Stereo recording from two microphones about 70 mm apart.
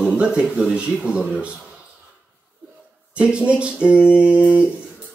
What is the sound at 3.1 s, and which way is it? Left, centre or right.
Speech, centre.